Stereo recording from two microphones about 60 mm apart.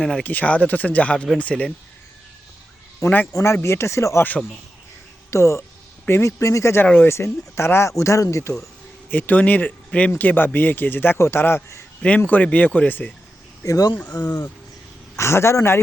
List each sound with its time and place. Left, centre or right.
0.2 s speech: left
3.0 s speech: left
5.3 s speech: left
6.4 s speech: left
9.0 s speech: left
12.0 s speech: left
13.7 s speech: left
14.0 s speech: left
15.1 s speech: left